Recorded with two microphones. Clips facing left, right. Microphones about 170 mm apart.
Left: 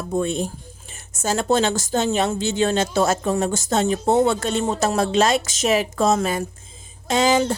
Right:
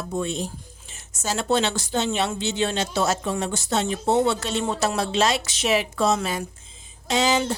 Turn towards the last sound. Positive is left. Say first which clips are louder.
# left 4 dB
turn(degrees=50)  # may be behind; listen again after turning